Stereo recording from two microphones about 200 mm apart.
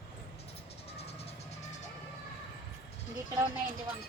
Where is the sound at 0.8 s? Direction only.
30° left (ahead or behind).